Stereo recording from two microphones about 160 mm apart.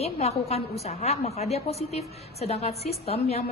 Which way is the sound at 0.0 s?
40° left (ahead or behind).